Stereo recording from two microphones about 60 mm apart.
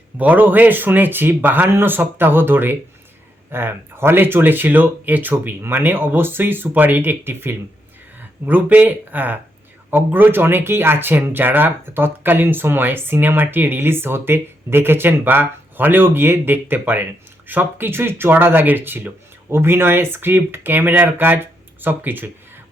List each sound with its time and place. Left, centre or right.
0.2 s speech: right